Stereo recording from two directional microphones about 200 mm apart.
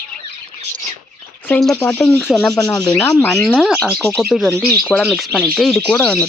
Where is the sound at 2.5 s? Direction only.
15° left (ahead or behind).